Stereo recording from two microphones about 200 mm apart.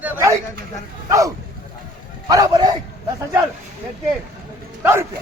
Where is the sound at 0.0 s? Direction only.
10° right (ahead or behind).